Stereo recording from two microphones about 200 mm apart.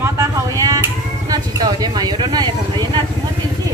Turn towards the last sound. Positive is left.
turn(degrees=-20)  # may be behind; listen again after turning